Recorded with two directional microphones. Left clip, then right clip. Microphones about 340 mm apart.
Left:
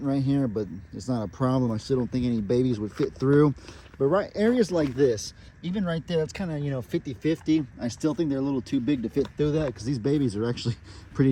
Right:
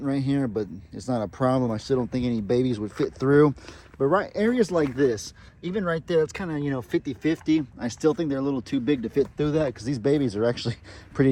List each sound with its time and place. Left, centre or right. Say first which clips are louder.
0.1 s speech: even; centre